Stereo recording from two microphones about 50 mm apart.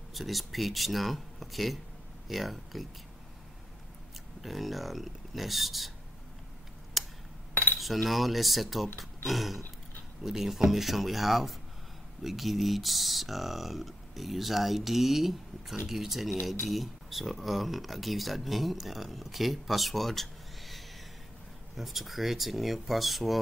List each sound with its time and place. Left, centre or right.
0.1 s speech: centre
4.4 s speech: centre
7.0 s hammer: centre
7.5 s cutlery: left
7.8 s speech: centre